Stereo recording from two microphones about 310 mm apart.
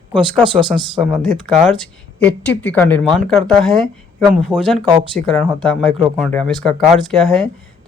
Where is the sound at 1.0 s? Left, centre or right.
Centre.